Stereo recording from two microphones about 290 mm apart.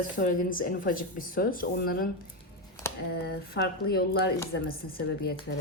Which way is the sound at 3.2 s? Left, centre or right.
Left.